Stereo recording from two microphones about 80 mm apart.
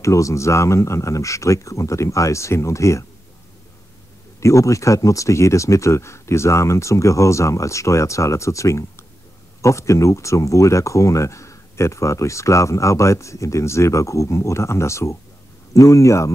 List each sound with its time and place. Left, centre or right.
0.0 s speech: left
4.4 s speech: left